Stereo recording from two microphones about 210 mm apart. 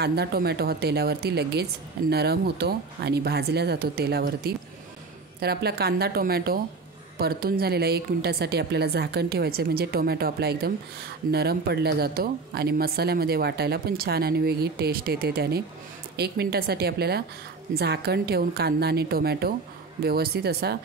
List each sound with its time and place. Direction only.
0.0 s speech: 50° right (ahead or behind)